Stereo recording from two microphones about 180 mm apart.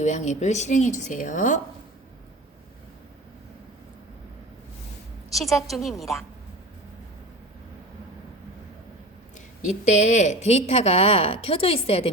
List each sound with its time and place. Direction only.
0.0 s speech: 40° left (ahead or behind)
5.3 s a woman's voice: centre (ahead or behind)
9.6 s speech: 40° left (ahead or behind)